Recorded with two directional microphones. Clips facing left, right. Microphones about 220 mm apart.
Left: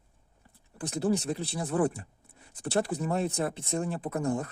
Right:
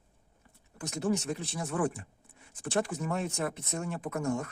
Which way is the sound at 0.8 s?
35° left (ahead or behind).